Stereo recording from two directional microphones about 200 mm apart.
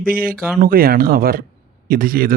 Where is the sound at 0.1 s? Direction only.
45° right (ahead or behind).